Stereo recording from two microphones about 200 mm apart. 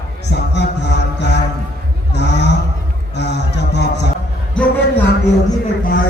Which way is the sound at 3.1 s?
60° left (ahead or behind).